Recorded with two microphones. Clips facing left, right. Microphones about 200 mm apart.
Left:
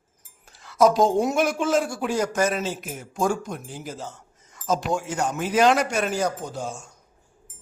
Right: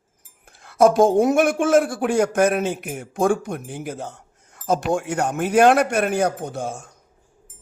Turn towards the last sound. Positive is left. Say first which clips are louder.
# right 4 dB
turn(degrees=-55)  # may be behind; listen again after turning